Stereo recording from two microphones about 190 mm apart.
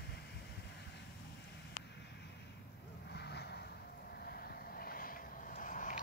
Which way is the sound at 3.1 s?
60° left (ahead or behind).